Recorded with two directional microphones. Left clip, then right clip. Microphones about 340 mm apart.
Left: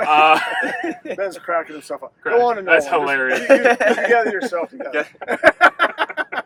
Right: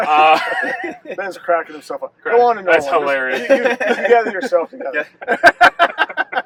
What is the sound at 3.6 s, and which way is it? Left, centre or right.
Speech, centre.